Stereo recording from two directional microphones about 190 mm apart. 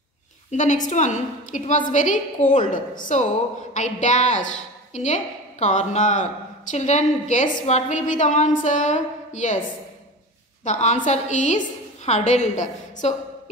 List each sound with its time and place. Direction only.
0.5 s a woman's voice: 40° left (ahead or behind)
10.6 s a woman's voice: 40° left (ahead or behind)